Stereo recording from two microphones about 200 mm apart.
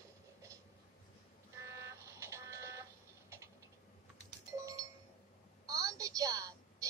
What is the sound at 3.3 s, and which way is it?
Typing, 10° right (ahead or behind).